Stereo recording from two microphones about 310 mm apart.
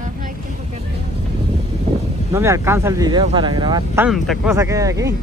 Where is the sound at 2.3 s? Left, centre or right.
Centre.